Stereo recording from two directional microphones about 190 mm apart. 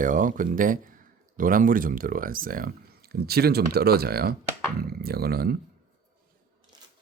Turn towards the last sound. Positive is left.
turn(degrees=-55)  # may be behind; listen again after turning